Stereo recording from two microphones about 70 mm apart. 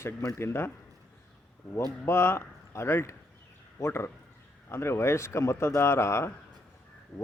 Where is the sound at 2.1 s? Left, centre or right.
Left.